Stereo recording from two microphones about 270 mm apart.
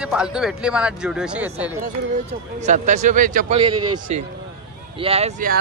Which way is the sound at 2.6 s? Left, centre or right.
Right.